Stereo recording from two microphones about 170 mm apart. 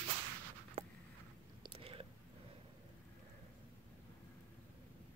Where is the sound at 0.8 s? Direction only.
40° right (ahead or behind).